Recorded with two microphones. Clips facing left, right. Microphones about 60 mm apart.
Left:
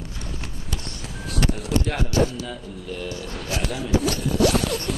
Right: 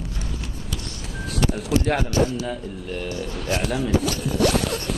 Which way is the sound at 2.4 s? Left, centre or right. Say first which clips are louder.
Right 4 dB; right.